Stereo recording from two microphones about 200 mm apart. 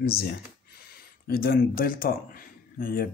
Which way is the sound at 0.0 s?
50° left (ahead or behind).